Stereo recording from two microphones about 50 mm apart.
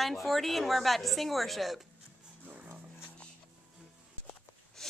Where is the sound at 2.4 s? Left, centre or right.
Right.